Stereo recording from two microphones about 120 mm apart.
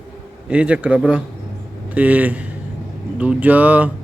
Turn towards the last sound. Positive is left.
turn(degrees=-10)  # may be behind; listen again after turning